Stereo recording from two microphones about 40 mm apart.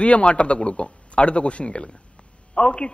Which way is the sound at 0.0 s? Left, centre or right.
Left.